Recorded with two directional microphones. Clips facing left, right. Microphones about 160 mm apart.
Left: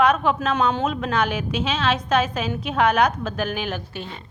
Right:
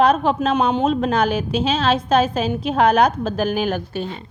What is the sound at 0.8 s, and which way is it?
A woman's voice, 35° right (ahead or behind).